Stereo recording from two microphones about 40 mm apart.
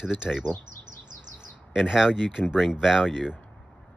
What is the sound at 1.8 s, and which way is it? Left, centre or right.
Speech, centre.